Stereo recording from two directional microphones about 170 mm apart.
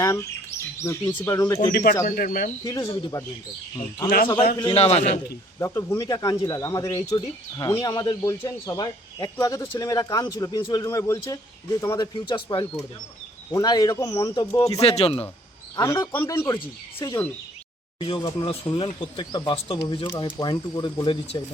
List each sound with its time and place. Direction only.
0.0 s a man's voice: 20° left (ahead or behind)
1.7 s speech: 55° left (ahead or behind)
2.6 s speech: 25° left (ahead or behind)
4.5 s a man's voice: 30° left (ahead or behind)
5.5 s speech: 15° left (ahead or behind)
14.8 s a man's voice: 35° left (ahead or behind)
15.7 s a man's voice: 20° left (ahead or behind)
18.0 s speech: 30° left (ahead or behind)